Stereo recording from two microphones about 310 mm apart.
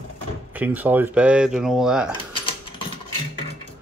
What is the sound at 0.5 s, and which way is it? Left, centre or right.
Speech, centre.